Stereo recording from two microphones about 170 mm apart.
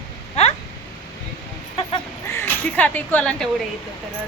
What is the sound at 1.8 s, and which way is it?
Crow, 35° left (ahead or behind).